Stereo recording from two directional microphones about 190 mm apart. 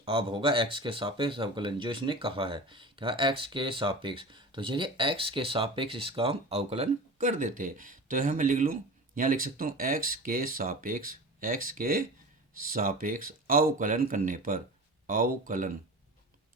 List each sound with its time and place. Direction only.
0.0 s speech: 25° right (ahead or behind); by 15.7 s 45° right (ahead or behind)